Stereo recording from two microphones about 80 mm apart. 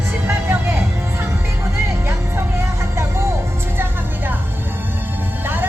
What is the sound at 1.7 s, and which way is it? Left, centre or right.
Music, right.